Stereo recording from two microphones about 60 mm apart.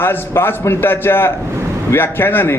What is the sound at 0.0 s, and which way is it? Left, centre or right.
A man's voice, left.